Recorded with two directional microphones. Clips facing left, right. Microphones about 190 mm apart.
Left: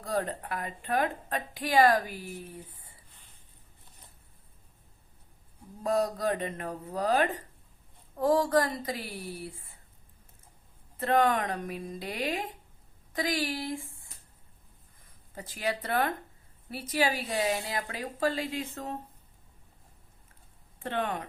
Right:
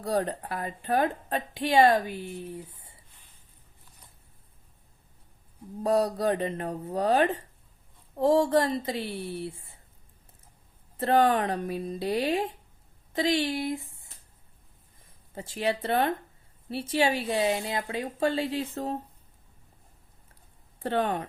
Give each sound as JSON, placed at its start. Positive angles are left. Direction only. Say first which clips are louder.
{"t": 0.0, "sound": "a woman's voice", "louder": "right 4 dB", "side_deg": -30}
{"t": 5.8, "sound": "a woman's voice", "louder": "right 3 dB", "side_deg": -30}
{"t": 11.0, "sound": "speech", "louder": "right 3 dB", "side_deg": -30}
{"t": 15.4, "sound": "a woman's voice", "louder": "right 4 dB", "side_deg": -25}
{"t": 20.7, "sound": "speech", "louder": "right 5 dB", "side_deg": -35}